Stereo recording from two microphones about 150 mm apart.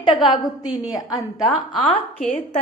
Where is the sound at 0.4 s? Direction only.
25° left (ahead or behind).